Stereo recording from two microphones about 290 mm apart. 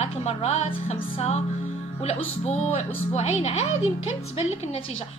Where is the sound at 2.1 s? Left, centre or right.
Left.